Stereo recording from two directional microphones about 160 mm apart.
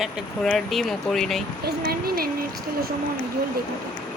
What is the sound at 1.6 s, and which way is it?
Speech, 75° right (ahead or behind).